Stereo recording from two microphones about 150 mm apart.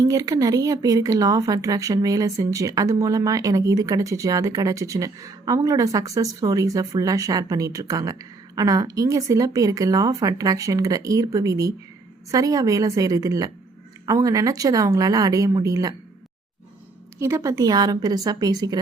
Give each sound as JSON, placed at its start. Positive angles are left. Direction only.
{"t": 0.0, "sound": "speech", "side_deg": -25}
{"t": 17.2, "sound": "speech", "side_deg": -20}